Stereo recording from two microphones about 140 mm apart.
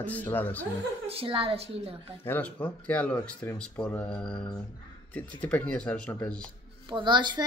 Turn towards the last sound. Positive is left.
turn(degrees=-35)  # may be behind; listen again after turning